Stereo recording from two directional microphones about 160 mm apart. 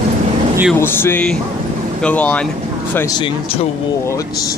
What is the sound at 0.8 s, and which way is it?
Speech, 15° left (ahead or behind).